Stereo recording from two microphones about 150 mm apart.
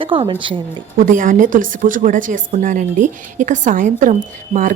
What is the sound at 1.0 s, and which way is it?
Speech, 65° right (ahead or behind).